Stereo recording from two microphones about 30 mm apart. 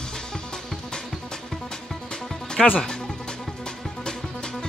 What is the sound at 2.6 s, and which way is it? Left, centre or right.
Speech, centre.